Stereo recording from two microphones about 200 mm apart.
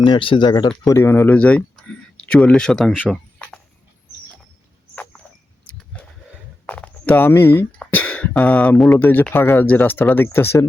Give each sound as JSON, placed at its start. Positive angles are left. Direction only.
{"t": 0.0, "sound": "speech", "side_deg": 25}
{"t": 5.6, "sound": "vehicle", "side_deg": 5}
{"t": 6.7, "sound": "speech", "side_deg": 5}